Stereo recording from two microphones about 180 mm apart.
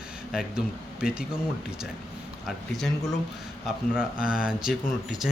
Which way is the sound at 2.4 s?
Centre (ahead or behind).